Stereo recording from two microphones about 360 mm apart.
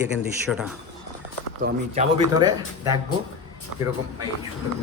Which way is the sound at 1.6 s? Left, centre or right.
Centre.